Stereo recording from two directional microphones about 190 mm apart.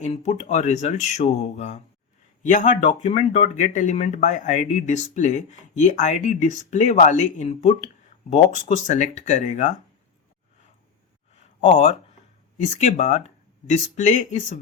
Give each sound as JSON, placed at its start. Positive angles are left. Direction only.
{"t": 0.0, "sound": "speech", "side_deg": 35}
{"t": 11.3, "sound": "a sound", "side_deg": 40}
{"t": 12.5, "sound": "speech", "side_deg": 40}